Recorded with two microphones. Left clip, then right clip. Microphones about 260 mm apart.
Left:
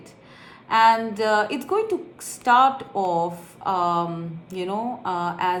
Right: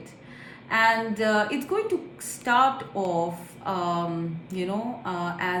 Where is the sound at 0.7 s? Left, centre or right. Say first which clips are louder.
Left 5 dB; centre.